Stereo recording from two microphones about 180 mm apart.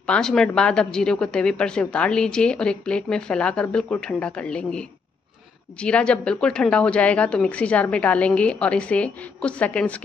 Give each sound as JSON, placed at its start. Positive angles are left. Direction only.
{"t": 0.0, "sound": "a woman's voice", "side_deg": 5}